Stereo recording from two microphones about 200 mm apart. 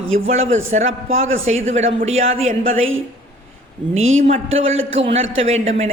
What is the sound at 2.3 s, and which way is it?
Speech, 30° right (ahead or behind).